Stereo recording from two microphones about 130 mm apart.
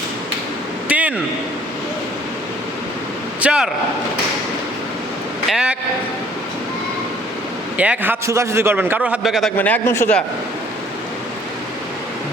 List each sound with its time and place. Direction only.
0.9 s a sound: 10° right (ahead or behind)
3.4 s a man's voice: 10° right (ahead or behind)
5.5 s a man's voice: 5° right (ahead or behind)
7.8 s a man's voice: 10° right (ahead or behind)
9.6 s a man's voice: 15° left (ahead or behind)